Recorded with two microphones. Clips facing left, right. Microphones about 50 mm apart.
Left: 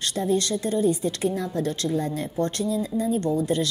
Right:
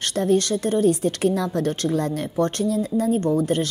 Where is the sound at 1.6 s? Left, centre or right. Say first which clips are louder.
Right 3 dB; right.